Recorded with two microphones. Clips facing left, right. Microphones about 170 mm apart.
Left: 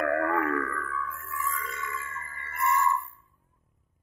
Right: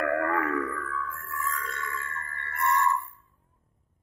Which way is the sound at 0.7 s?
Centre (ahead or behind).